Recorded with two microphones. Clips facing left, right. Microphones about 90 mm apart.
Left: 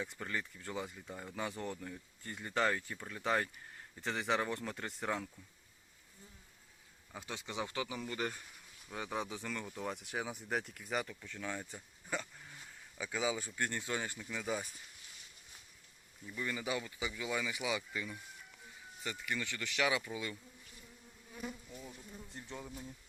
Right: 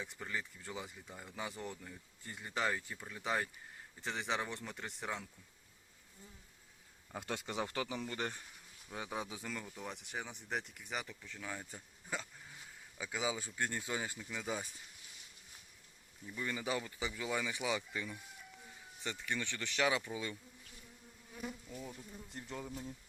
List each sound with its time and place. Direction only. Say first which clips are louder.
0.0 s speech: left 2 dB; centre (ahead or behind)
7.1 s speech: right 4 dB; 55° right (ahead or behind)
7.4 s speech: left 2 dB; 40° right (ahead or behind)
8.9 s speech: left 2 dB; 15° right (ahead or behind)
9.8 s speech: left 4 dB; centre (ahead or behind)
13.0 s speech: left 2 dB; 20° right (ahead or behind)
16.2 s speech: even; 20° right (ahead or behind)
22.3 s speech: right 1 dB; 50° right (ahead or behind)